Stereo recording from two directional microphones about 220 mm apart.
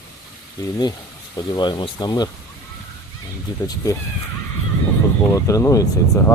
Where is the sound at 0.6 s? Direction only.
15° left (ahead or behind).